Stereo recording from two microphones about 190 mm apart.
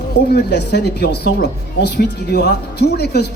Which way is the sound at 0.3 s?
60° left (ahead or behind).